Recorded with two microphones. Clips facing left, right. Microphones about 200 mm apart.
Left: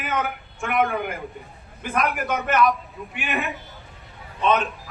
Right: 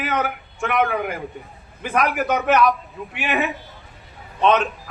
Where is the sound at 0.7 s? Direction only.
Centre (ahead or behind).